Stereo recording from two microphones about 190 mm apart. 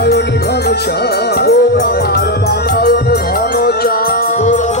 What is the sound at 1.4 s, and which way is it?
Music, 55° left (ahead or behind).